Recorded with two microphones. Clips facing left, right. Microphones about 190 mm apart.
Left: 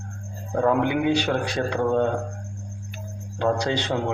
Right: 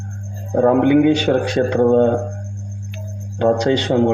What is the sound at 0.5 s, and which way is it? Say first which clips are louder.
A man's voice: right 9 dB; 40° right (ahead or behind).